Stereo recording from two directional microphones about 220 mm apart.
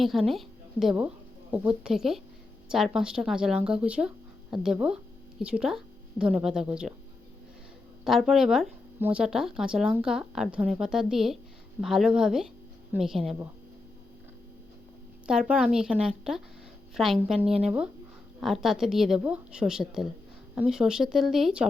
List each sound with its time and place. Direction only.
0.0 s a woman's voice: centre (ahead or behind)
8.0 s speech: centre (ahead or behind)
15.3 s speech: 5° right (ahead or behind)
17.4 s speech: 25° right (ahead or behind)
18.3 s speech: centre (ahead or behind)